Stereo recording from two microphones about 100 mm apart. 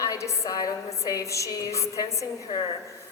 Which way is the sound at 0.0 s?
30° left (ahead or behind).